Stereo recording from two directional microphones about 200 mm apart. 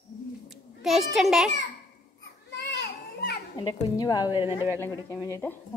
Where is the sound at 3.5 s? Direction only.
20° left (ahead or behind).